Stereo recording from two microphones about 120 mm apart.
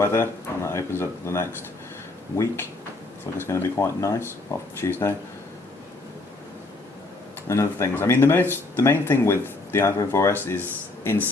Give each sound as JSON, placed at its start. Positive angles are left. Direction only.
{"t": 0.0, "sound": "speech", "side_deg": 20}
{"t": 7.4, "sound": "speech", "side_deg": 25}